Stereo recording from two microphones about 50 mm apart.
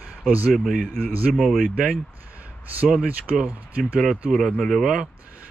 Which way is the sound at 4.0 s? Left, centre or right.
Centre.